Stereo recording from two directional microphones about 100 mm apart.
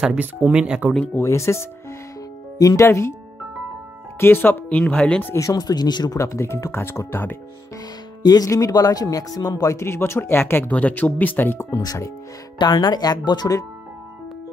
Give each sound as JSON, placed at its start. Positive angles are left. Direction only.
{"t": 0.0, "sound": "speech", "side_deg": -10}
{"t": 1.1, "sound": "speech", "side_deg": 30}
{"t": 4.2, "sound": "speech", "side_deg": 20}
{"t": 5.2, "sound": "speech", "side_deg": 30}
{"t": 6.1, "sound": "speech", "side_deg": 30}
{"t": 8.2, "sound": "speech", "side_deg": 40}
{"t": 11.7, "sound": "speech", "side_deg": 35}